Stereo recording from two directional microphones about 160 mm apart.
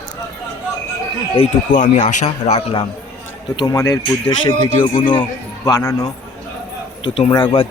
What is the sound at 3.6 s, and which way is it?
Speech, 20° left (ahead or behind).